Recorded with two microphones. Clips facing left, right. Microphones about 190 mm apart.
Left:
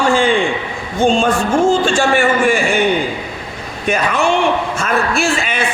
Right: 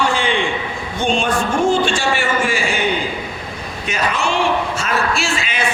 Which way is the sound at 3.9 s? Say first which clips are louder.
Left 5 dB; 55° left (ahead or behind).